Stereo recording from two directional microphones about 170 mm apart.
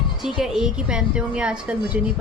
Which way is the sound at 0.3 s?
5° right (ahead or behind).